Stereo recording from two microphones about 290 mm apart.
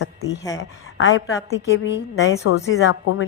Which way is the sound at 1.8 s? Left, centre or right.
Left.